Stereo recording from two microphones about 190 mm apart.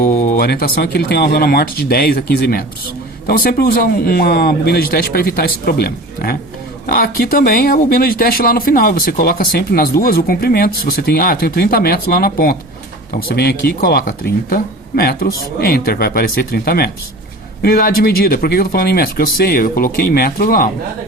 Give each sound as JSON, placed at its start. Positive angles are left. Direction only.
{"t": 0.0, "sound": "speech", "side_deg": 40}